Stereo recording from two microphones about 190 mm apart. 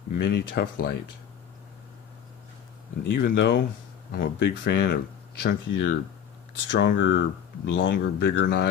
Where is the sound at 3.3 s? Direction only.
60° left (ahead or behind).